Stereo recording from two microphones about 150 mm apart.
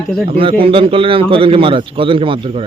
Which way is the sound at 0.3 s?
40° right (ahead or behind).